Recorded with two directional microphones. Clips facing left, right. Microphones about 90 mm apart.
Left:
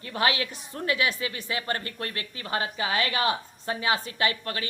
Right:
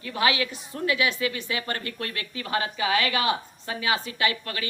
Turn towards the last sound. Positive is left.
turn(degrees=35)  # may be behind; listen again after turning